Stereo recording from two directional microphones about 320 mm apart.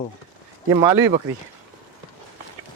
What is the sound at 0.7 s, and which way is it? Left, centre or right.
Speech, centre.